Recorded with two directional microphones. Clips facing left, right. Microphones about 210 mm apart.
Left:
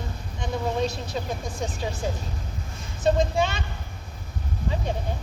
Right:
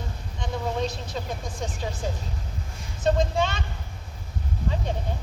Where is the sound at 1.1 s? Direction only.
10° left (ahead or behind).